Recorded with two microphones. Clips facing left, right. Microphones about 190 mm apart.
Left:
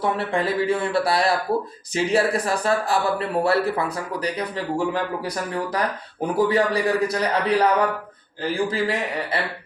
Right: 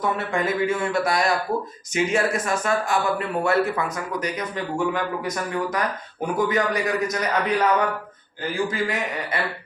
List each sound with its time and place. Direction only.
0.0 s speech: 30° left (ahead or behind)